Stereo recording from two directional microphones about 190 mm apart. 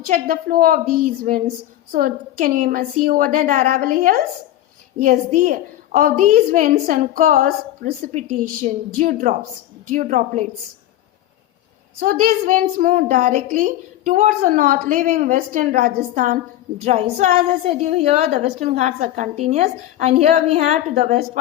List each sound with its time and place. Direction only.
0.1 s a woman's voice: 45° right (ahead or behind)
11.9 s a woman's voice: 45° right (ahead or behind)